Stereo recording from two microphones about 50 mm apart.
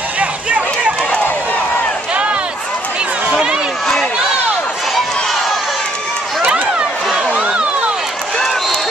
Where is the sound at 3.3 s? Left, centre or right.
Centre.